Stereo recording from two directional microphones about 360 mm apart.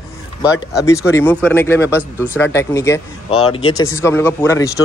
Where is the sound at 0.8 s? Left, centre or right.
Centre.